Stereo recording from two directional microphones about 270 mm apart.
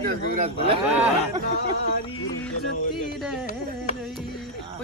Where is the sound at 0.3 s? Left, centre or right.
Right.